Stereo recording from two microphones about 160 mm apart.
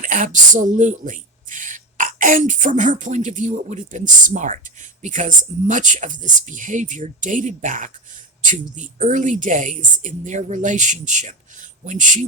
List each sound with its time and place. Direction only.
0.0 s speech: 55° right (ahead or behind)